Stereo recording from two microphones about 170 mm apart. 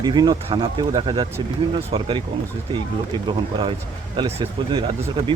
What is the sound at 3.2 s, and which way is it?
Speech, 30° right (ahead or behind).